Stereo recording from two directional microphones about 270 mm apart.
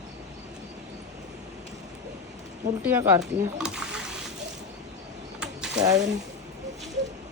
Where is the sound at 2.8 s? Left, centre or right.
Centre.